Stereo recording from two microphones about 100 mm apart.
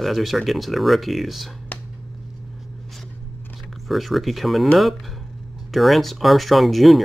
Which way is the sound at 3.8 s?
Centre (ahead or behind).